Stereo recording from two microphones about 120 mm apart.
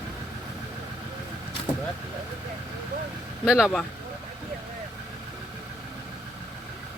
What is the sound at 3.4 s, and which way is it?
Speech, 5° right (ahead or behind).